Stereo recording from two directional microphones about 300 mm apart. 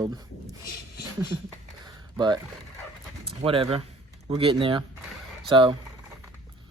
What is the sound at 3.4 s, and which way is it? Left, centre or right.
Speech, centre.